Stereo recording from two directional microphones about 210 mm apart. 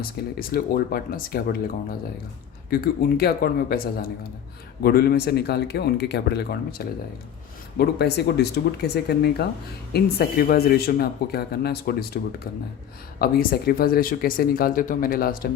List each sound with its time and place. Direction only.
0.3 s speech: 45° left (ahead or behind)
2.6 s speech: 45° left (ahead or behind)